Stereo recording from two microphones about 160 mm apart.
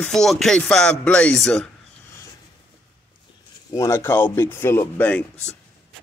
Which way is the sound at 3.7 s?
15° left (ahead or behind).